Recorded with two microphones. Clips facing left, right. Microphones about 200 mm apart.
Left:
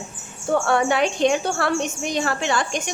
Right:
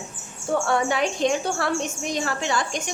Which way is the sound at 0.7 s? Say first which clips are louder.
Left 3 dB; 65° left (ahead or behind).